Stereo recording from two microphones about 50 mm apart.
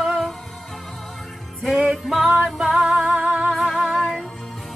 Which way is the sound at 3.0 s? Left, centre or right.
Right.